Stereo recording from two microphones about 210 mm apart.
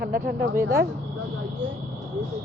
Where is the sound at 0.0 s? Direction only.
50° right (ahead or behind).